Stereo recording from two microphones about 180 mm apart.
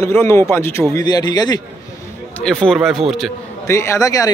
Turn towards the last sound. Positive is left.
turn(degrees=20)  # may be behind; listen again after turning